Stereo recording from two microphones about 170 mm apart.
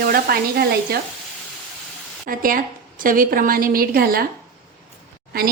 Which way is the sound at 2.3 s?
55° right (ahead or behind).